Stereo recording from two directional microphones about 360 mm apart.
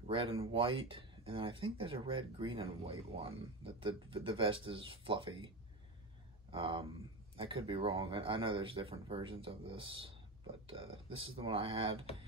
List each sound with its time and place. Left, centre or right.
0.1 s speech: centre
6.5 s speech: centre